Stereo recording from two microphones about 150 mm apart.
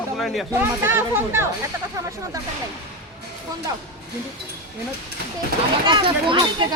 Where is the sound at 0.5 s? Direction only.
15° right (ahead or behind).